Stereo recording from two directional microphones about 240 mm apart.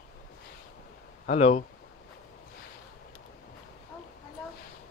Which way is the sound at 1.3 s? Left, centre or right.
Left.